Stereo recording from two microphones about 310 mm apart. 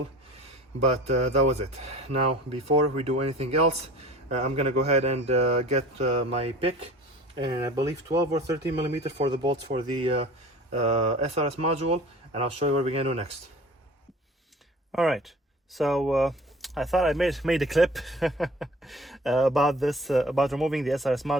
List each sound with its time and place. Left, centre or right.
0.9 s speech: centre
14.9 s speech: centre